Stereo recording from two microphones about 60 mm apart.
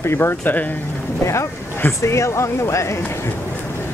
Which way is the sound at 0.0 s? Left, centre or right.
Left.